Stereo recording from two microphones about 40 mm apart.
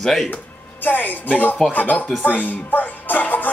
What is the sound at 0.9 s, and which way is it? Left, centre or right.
Speech, left.